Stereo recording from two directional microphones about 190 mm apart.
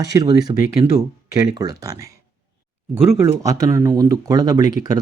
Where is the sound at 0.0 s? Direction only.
20° right (ahead or behind).